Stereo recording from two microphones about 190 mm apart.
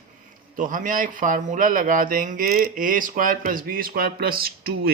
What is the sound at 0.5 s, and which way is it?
A man's voice, 45° right (ahead or behind).